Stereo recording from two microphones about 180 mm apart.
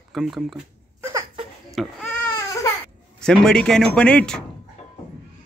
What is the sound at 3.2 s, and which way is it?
Speech, 5° left (ahead or behind).